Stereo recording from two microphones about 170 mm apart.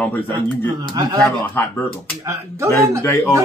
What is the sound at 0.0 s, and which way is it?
Speech, 10° left (ahead or behind).